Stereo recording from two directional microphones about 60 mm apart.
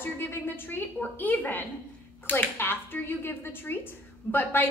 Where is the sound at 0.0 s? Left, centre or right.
Left.